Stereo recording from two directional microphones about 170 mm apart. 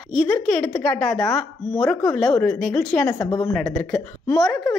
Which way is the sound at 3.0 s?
20° left (ahead or behind).